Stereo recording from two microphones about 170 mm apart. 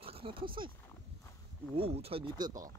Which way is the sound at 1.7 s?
35° right (ahead or behind).